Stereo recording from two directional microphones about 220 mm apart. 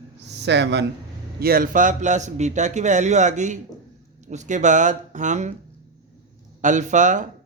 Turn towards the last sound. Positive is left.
turn(degrees=-35)  # may be behind; listen again after turning